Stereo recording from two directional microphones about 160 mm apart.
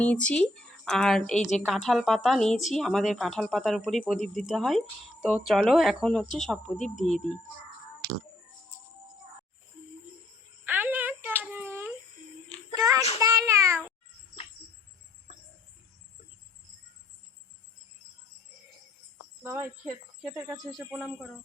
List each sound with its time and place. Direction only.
0.0 s a woman's voice: 10° left (ahead or behind)
6.7 s speech: 50° left (ahead or behind)
10.7 s a sound: 10° right (ahead or behind)
13.1 s meow: 20° right (ahead or behind)
19.4 s speech: 15° right (ahead or behind)